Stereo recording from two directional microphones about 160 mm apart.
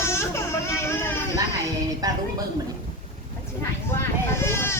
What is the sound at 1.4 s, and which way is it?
Music, 20° right (ahead or behind).